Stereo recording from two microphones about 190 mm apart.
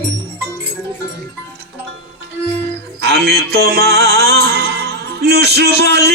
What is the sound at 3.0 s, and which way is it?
Music, 60° right (ahead or behind).